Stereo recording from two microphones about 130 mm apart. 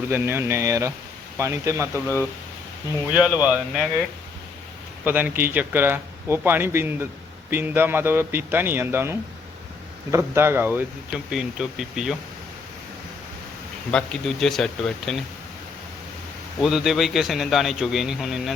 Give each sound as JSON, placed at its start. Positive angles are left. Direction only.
{"t": 0.1, "sound": "speech", "side_deg": -20}
{"t": 3.1, "sound": "speech", "side_deg": -10}
{"t": 5.0, "sound": "speech", "side_deg": -15}
{"t": 11.3, "sound": "a man's voice", "side_deg": -5}
{"t": 13.9, "sound": "a man's voice", "side_deg": 5}
{"t": 16.6, "sound": "a man's voice", "side_deg": 0}